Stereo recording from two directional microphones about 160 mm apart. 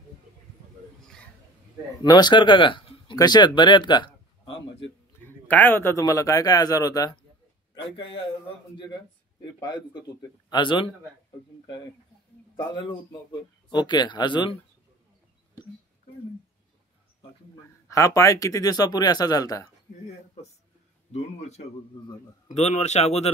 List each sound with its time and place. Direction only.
2.0 s speech: 25° left (ahead or behind)
5.2 s a man's voice: 10° left (ahead or behind); by 8.2 s 30° left (ahead or behind)
9.4 s speech: 25° left (ahead or behind)
12.5 s speech: 30° left (ahead or behind)
17.8 s speech: 20° left (ahead or behind)
21.1 s speech: 45° left (ahead or behind)